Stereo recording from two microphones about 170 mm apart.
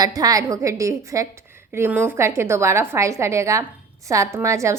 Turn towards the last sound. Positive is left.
turn(degrees=-15)  # may be behind; listen again after turning